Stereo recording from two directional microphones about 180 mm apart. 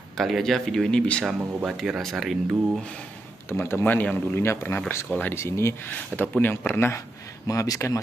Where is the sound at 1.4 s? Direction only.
5° right (ahead or behind).